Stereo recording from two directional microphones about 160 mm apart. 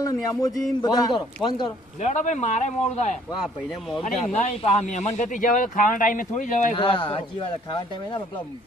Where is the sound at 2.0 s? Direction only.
45° left (ahead or behind).